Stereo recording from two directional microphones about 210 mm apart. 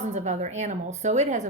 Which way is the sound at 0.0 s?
35° right (ahead or behind).